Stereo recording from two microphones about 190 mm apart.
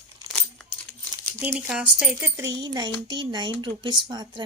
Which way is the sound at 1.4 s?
5° right (ahead or behind).